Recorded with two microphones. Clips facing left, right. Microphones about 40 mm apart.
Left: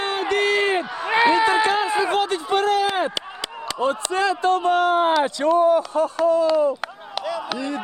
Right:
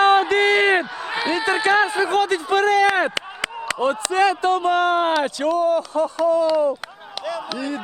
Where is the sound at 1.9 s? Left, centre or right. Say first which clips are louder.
Left 1 dB; left.